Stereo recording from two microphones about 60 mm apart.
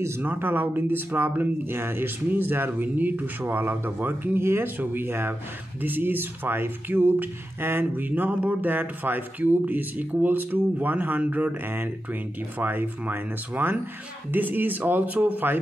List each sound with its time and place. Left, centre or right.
0.2 s speech: right